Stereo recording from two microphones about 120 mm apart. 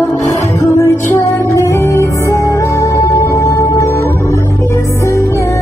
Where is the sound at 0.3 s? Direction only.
25° left (ahead or behind).